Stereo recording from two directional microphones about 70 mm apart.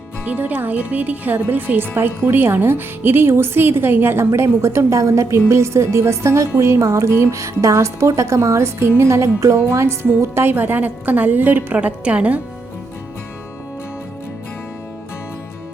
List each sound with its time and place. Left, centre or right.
0.3 s speech: right
4.3 s speech: right; by 12.4 s centre